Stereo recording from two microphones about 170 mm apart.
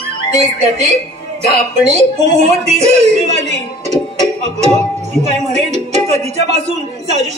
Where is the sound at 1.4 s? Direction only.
40° right (ahead or behind).